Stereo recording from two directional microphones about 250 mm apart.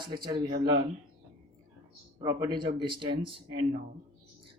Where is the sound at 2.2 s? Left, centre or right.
Centre.